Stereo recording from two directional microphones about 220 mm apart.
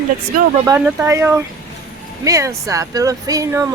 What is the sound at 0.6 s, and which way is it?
Speech, 10° right (ahead or behind).